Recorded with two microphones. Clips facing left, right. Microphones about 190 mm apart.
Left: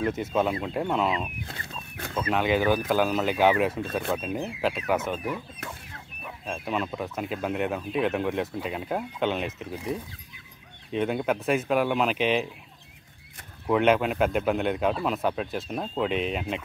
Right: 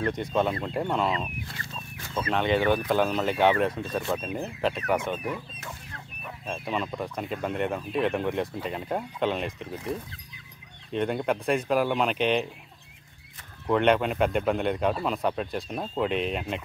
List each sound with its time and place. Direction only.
0.0 s a man's voice: 5° left (ahead or behind)
1.4 s speech: 55° left (ahead or behind)
2.2 s a man's voice: 5° left (ahead or behind)
6.2 s a man's voice: centre (ahead or behind)
13.7 s a man's voice: 5° left (ahead or behind)